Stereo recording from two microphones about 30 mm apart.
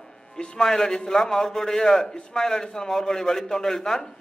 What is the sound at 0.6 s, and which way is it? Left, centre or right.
A man's voice, centre.